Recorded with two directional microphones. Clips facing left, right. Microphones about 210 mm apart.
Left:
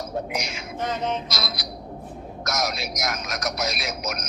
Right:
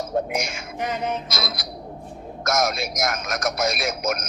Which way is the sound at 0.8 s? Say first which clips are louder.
Even; 10° right (ahead or behind).